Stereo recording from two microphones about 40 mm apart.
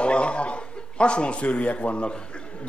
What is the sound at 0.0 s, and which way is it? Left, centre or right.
A man's voice, left.